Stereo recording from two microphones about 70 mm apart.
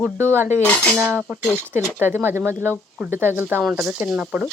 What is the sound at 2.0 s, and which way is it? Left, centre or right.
Speech, right.